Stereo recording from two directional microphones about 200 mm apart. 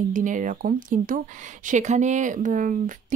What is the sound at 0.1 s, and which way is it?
Speech, 40° right (ahead or behind).